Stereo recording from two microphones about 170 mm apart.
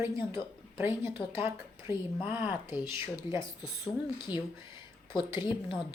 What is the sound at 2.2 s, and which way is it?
Speech, 10° right (ahead or behind).